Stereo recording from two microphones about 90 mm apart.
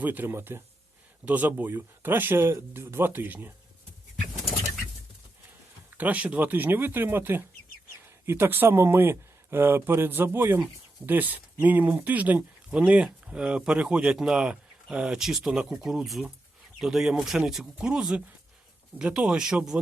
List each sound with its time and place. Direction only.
0.0 s speech: 20° right (ahead or behind)
6.0 s speech: 15° right (ahead or behind)